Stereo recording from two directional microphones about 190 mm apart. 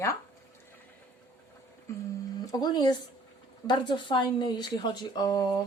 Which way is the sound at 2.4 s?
20° left (ahead or behind).